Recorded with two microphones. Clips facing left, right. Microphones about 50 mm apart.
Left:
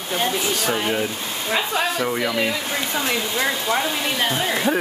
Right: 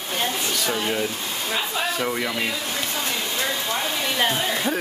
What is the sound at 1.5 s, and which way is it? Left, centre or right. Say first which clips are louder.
Speech: left 5 dB; left.